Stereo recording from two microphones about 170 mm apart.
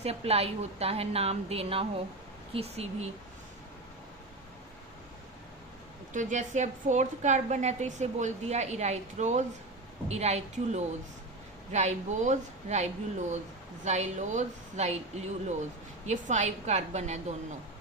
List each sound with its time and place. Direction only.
0.0 s a woman's voice: 35° right (ahead or behind)
6.1 s a woman's voice: 45° right (ahead or behind)